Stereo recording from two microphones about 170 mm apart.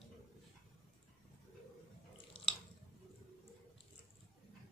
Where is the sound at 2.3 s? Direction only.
30° left (ahead or behind).